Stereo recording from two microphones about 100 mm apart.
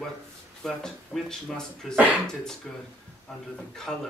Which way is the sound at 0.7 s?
5° left (ahead or behind).